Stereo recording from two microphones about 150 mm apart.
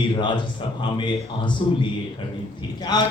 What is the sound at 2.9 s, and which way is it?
Speech, 30° left (ahead or behind).